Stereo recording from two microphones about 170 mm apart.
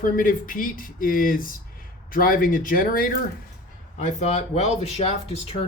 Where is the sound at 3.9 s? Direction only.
40° left (ahead or behind).